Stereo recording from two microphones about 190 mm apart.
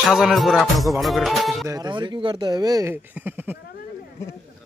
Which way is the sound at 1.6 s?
20° right (ahead or behind).